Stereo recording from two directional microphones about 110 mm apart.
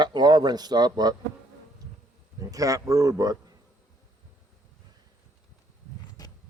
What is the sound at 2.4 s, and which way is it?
Speech, 30° right (ahead or behind).